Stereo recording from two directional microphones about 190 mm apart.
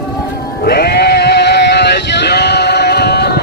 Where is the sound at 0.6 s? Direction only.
55° left (ahead or behind).